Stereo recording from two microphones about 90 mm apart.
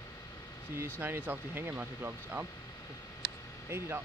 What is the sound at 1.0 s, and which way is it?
Speech, 20° right (ahead or behind).